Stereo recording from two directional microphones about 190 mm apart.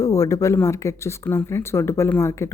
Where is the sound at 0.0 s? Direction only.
15° left (ahead or behind).